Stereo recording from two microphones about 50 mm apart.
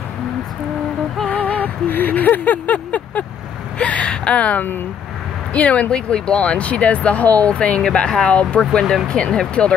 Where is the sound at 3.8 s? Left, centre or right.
Left.